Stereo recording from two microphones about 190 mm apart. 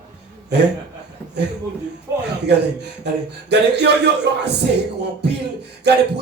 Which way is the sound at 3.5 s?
60° right (ahead or behind).